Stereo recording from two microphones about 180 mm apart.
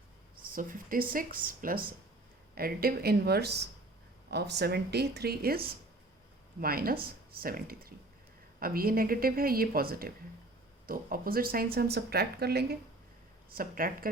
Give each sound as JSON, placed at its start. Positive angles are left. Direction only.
{"t": 0.4, "sound": "speech", "side_deg": -50}